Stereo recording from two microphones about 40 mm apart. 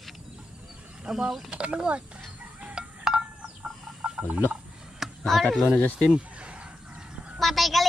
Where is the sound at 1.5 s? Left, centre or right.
Right.